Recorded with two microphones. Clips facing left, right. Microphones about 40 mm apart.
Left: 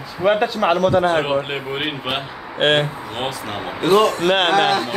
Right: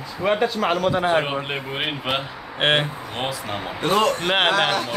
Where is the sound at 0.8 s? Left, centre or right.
Centre.